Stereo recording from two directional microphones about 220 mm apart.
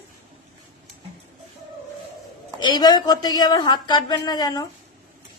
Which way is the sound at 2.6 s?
20° left (ahead or behind).